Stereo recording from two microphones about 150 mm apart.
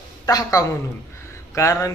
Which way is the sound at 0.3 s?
25° left (ahead or behind).